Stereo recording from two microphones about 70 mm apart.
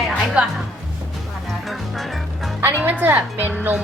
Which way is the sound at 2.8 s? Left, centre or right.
Right.